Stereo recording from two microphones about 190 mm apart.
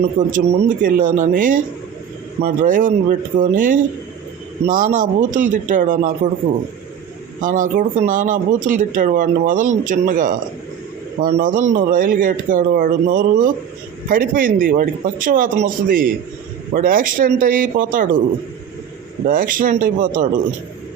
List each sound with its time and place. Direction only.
0.3 s speech: 45° right (ahead or behind)
7.4 s speech: 45° right (ahead or behind)
19.2 s speech: 45° right (ahead or behind)